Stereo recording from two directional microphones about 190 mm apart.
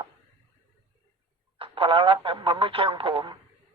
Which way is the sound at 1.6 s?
25° right (ahead or behind).